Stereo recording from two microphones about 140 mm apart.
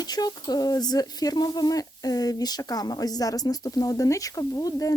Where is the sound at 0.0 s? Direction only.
30° left (ahead or behind).